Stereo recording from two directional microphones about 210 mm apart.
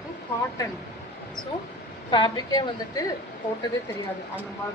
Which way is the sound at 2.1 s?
20° left (ahead or behind).